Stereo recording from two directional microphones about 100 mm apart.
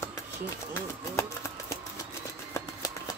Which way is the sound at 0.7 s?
30° left (ahead or behind).